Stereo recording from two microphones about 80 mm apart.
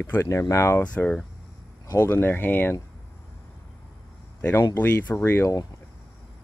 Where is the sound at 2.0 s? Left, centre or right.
Left.